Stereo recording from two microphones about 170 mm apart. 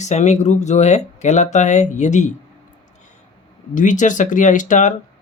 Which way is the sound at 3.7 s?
45° left (ahead or behind).